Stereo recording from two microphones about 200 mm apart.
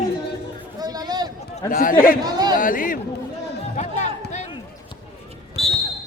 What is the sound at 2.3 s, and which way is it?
Speech, 20° right (ahead or behind).